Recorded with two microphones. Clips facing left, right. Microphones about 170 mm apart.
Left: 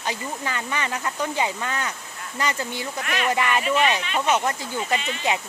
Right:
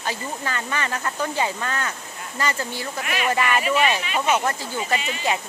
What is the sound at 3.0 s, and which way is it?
Speech, 5° right (ahead or behind).